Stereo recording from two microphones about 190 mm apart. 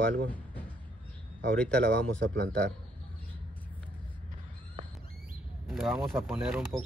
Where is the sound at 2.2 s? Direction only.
55° right (ahead or behind).